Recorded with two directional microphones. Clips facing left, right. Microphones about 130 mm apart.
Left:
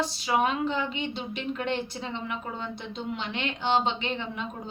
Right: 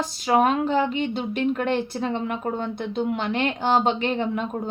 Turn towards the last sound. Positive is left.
turn(degrees=-45)  # may be behind; listen again after turning